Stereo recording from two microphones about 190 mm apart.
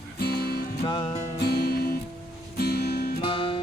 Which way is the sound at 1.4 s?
55° left (ahead or behind).